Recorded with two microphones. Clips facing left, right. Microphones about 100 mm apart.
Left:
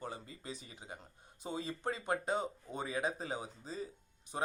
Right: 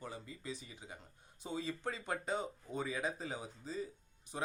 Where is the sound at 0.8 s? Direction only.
35° left (ahead or behind).